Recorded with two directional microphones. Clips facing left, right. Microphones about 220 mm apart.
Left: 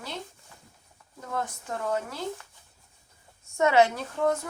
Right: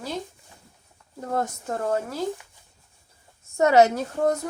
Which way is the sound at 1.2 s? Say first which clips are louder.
Right 6 dB; 40° right (ahead or behind).